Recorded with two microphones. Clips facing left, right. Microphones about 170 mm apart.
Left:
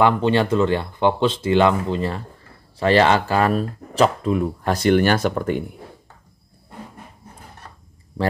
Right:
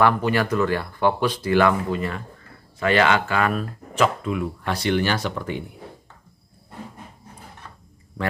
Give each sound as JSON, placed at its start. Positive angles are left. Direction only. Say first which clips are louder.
{"t": 0.0, "sound": "speech", "louder": "left 3 dB", "side_deg": 25}